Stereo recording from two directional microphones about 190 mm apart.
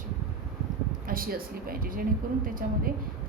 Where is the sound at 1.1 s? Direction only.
50° right (ahead or behind).